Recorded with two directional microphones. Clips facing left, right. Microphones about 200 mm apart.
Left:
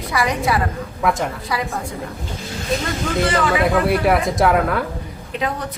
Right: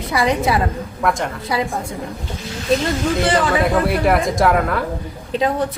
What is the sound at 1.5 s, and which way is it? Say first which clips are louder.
Speech: right 5 dB; 25° right (ahead or behind).